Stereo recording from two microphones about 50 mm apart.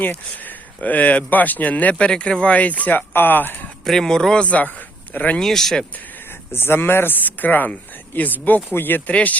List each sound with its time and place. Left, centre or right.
0.0 s speech: left
2.0 s speech: centre
3.1 s speech: left
3.8 s speech: centre
4.4 s speech: left
5.4 s speech: centre
6.5 s speech: left
9.0 s speech: left